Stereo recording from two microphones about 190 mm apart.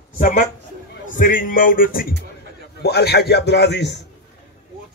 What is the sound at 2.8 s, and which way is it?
A man's voice, 60° left (ahead or behind).